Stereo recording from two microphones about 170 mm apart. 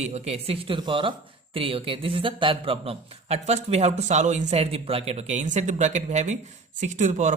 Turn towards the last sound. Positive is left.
turn(degrees=-45)  # may be behind; listen again after turning